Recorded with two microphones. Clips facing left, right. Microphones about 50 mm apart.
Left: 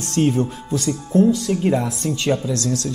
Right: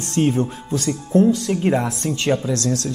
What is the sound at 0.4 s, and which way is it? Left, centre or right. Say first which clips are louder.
Speech: even; right.